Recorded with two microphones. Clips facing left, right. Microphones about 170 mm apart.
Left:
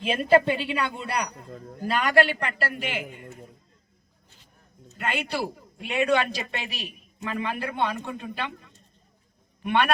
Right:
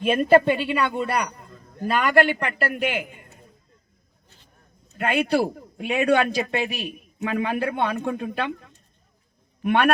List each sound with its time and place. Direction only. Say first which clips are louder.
0.0 s a man's voice: right 4 dB; 55° right (ahead or behind)
4.9 s a man's voice: right 8 dB; 50° right (ahead or behind)